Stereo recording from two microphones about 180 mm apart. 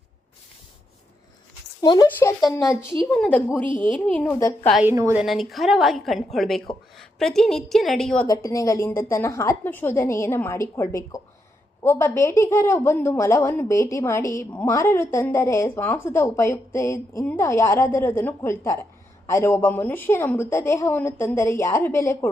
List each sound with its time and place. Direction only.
1.8 s speech: 20° left (ahead or behind)
2.0 s a woman's voice: 10° left (ahead or behind)
3.7 s a woman's voice: 25° right (ahead or behind)
4.0 s a woman's voice: 10° left (ahead or behind)
4.8 s a woman's voice: 15° right (ahead or behind)
5.2 s a woman's voice: centre (ahead or behind)
8.3 s a woman's voice: 15° left (ahead or behind)